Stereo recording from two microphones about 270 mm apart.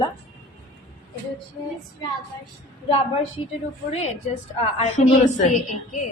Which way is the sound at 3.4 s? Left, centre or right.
Centre.